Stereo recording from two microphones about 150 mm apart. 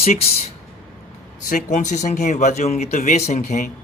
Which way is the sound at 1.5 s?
60° left (ahead or behind).